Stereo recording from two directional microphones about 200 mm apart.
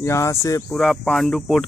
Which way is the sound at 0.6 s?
5° left (ahead or behind).